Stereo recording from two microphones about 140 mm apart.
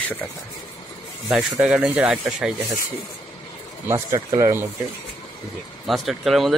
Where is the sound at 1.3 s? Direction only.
10° right (ahead or behind).